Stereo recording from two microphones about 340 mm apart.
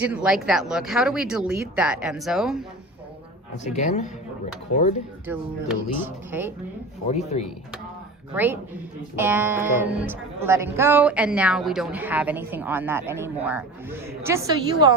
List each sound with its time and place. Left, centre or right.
0.0 s a woman's voice: centre
3.5 s a man's voice: left
5.2 s a woman's voice: centre
7.1 s a man's voice: centre
9.1 s a woman's voice: centre